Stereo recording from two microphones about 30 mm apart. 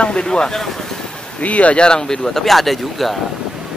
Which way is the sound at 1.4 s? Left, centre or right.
Left.